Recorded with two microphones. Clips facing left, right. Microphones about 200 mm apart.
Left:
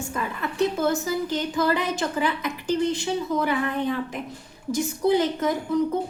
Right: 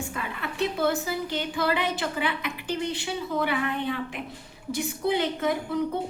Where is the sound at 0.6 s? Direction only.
45° left (ahead or behind).